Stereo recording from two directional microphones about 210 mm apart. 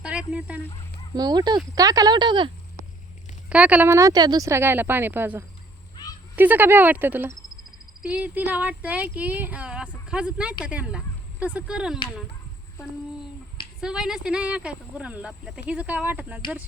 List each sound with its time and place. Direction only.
0.0 s a sound: 5° right (ahead or behind)
1.1 s speech: 20° right (ahead or behind)
3.5 s speech: 5° right (ahead or behind)
12.8 s a child's voice: 15° left (ahead or behind)
13.8 s speech: 5° right (ahead or behind)